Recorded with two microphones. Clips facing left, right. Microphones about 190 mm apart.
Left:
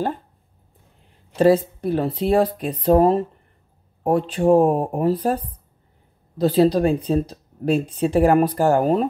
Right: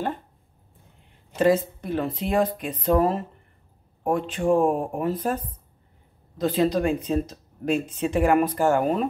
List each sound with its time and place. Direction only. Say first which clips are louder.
1.4 s speech: left 5 dB; 35° left (ahead or behind)